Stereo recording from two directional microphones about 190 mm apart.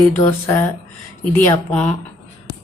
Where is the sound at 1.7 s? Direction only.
5° left (ahead or behind).